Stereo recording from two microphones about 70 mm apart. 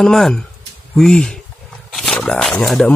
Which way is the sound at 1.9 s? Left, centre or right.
Centre.